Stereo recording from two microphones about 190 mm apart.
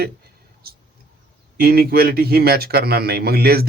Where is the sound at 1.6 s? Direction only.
55° right (ahead or behind).